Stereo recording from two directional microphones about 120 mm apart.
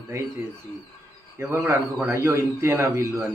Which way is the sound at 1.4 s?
20° right (ahead or behind).